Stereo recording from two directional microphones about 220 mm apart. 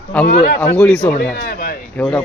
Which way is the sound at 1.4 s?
40° left (ahead or behind).